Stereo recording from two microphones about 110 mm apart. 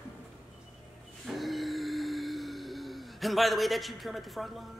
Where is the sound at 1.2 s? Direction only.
Centre (ahead or behind).